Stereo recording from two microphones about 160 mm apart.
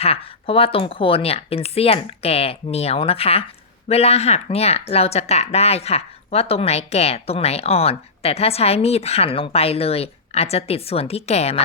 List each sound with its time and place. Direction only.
0.0 s speech: 35° left (ahead or behind)